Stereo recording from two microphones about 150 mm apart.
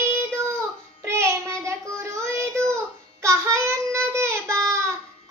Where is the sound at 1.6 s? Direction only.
20° right (ahead or behind).